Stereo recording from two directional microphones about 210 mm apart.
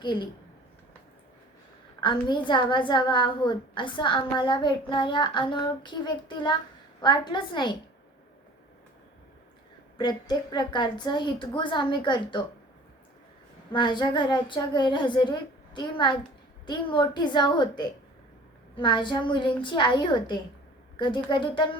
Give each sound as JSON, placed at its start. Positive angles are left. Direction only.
{"t": 0.0, "sound": "a woman's voice", "side_deg": 20}
{"t": 2.0, "sound": "a woman's voice", "side_deg": 20}
{"t": 10.0, "sound": "a woman's voice", "side_deg": 20}
{"t": 13.7, "sound": "a woman's voice", "side_deg": 20}